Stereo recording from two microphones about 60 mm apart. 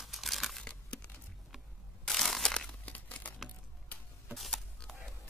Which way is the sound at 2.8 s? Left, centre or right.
Left.